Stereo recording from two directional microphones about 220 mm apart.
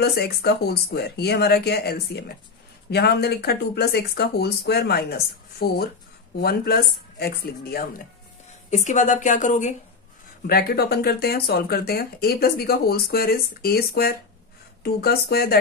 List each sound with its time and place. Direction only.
0.0 s speech: 45° left (ahead or behind)
8.6 s a woman's voice: 35° left (ahead or behind)